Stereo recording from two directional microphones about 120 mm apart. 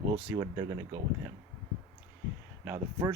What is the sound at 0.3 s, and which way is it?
Speech, 35° right (ahead or behind).